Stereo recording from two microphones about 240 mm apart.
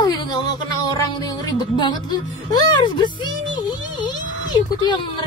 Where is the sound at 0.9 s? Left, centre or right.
Centre.